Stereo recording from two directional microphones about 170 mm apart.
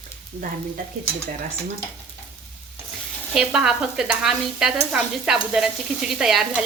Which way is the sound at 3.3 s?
5° right (ahead or behind).